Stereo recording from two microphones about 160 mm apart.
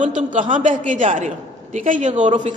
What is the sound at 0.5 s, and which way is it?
A woman's voice, 50° right (ahead or behind).